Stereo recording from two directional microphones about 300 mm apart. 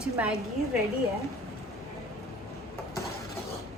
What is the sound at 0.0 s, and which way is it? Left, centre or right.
Speech, centre.